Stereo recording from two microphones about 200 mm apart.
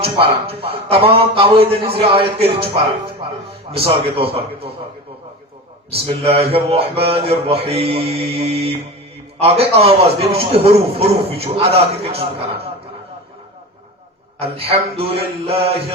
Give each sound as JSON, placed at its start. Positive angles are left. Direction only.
{"t": 0.0, "sound": "a man's voice", "side_deg": -30}
{"t": 3.7, "sound": "a man's voice", "side_deg": -30}
{"t": 5.9, "sound": "a man's voice", "side_deg": -30}
{"t": 14.3, "sound": "a man's voice", "side_deg": -30}